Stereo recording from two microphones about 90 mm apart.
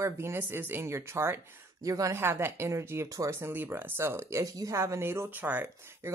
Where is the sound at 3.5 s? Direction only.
20° right (ahead or behind).